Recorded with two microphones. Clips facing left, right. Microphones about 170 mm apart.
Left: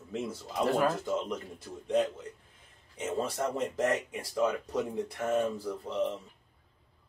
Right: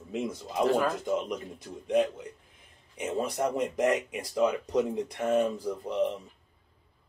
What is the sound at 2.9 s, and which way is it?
Speech, 15° right (ahead or behind).